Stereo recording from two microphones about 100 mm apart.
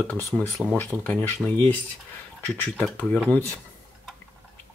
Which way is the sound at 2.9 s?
10° left (ahead or behind).